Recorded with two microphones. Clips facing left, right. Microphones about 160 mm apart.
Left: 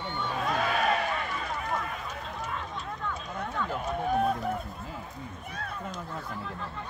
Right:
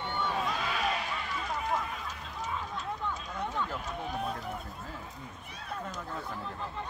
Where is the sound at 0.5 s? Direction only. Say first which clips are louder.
Left 5 dB; 50° left (ahead or behind).